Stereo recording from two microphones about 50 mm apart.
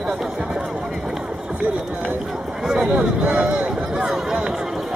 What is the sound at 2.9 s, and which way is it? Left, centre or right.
Speech, right.